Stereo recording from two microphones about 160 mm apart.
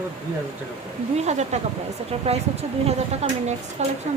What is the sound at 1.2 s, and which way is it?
Speech, 45° right (ahead or behind).